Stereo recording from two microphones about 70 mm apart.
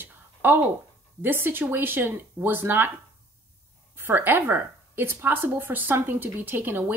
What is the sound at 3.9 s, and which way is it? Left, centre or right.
A woman's voice, right.